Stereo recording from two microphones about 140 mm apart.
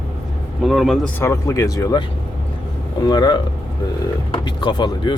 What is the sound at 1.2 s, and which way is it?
Speech, 20° left (ahead or behind).